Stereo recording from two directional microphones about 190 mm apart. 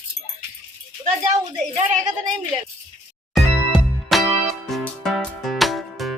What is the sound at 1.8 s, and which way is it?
Speech, 40° right (ahead or behind).